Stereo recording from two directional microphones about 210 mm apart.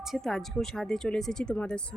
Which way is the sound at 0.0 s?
Centre (ahead or behind).